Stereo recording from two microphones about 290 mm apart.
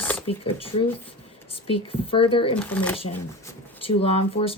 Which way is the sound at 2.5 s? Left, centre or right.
Centre.